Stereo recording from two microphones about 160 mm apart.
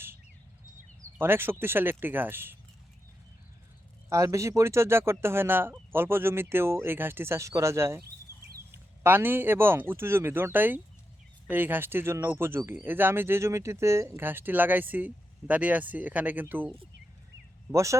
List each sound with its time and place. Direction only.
1.2 s speech: 15° right (ahead or behind)
4.1 s speech: 20° right (ahead or behind)
8.3 s a sound: 20° left (ahead or behind)
9.0 s speech: 15° right (ahead or behind)
17.7 s speech: 20° right (ahead or behind)